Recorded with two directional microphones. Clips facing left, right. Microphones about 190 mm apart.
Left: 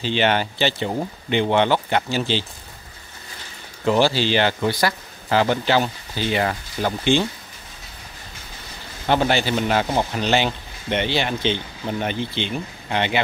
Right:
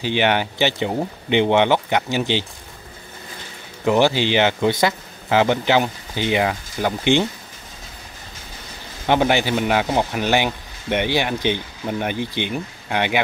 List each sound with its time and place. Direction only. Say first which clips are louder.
0.0 s speech: right 1 dB; 15° right (ahead or behind)
3.8 s speech: right 1 dB; 15° right (ahead or behind)
9.0 s speech: right 2 dB; 15° right (ahead or behind)